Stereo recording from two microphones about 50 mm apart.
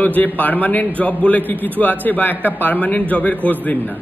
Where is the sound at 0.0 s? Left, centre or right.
Left.